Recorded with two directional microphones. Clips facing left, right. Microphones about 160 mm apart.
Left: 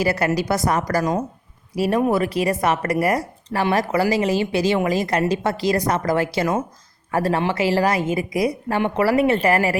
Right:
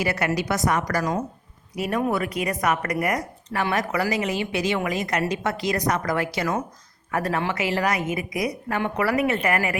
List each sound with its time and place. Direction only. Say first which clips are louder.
0.0 s a woman's voice: left 4 dB; 35° left (ahead or behind)